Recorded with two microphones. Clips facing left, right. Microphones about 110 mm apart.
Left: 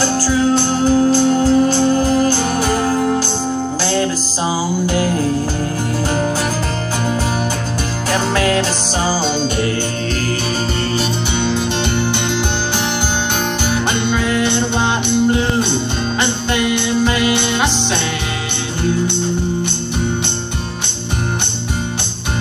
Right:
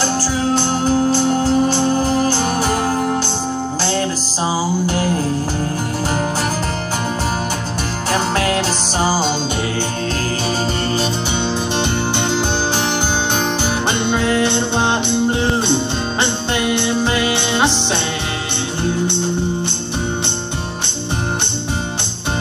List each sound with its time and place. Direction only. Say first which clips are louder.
0.5 s music: even; 30° right (ahead or behind)
8.1 s music: left 2 dB; 35° right (ahead or behind)
14.0 s music: even; 25° right (ahead or behind)